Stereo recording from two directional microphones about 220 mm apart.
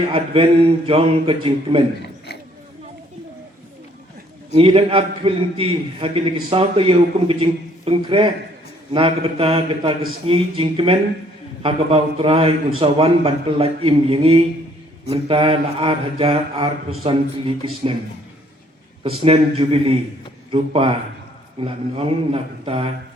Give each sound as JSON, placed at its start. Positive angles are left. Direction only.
{"t": 0.1, "sound": "a man's voice", "side_deg": -25}
{"t": 2.0, "sound": "a sound", "side_deg": 45}
{"t": 4.5, "sound": "a man's voice", "side_deg": -25}
{"t": 19.0, "sound": "a man's voice", "side_deg": -25}